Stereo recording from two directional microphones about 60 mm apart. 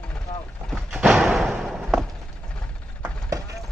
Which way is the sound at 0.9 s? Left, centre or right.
Centre.